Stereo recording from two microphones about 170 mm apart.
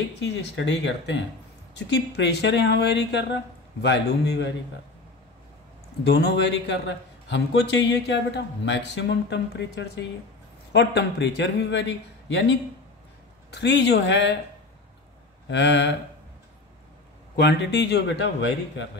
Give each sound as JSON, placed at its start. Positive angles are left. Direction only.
{"t": 0.2, "sound": "a man's voice", "side_deg": 90}
{"t": 6.0, "sound": "a man's voice", "side_deg": 80}
{"t": 15.4, "sound": "a man's voice", "side_deg": 90}
{"t": 17.4, "sound": "a man's voice", "side_deg": 85}